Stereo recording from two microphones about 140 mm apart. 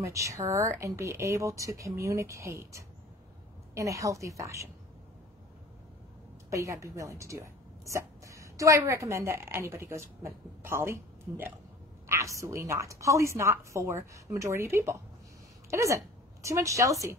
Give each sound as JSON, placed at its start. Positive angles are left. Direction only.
{"t": 0.0, "sound": "a woman's voice", "side_deg": -20}
{"t": 6.5, "sound": "a woman's voice", "side_deg": -20}